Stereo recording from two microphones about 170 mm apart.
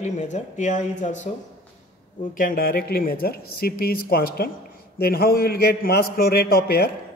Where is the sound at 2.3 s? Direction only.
55° left (ahead or behind).